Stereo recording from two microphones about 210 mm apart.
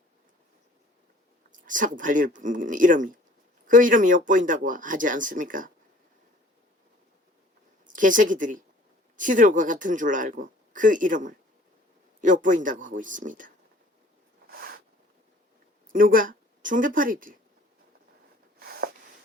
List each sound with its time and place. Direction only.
1.5 s speech: 40° right (ahead or behind)
7.9 s speech: 40° right (ahead or behind)
14.5 s a sound: 45° right (ahead or behind)
15.9 s speech: 40° right (ahead or behind)
18.6 s snort: 45° right (ahead or behind)